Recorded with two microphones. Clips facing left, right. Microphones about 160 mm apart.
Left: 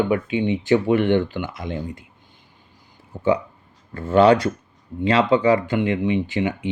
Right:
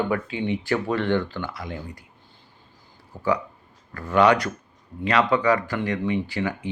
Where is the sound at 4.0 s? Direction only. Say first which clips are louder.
Left 4 dB; 30° left (ahead or behind).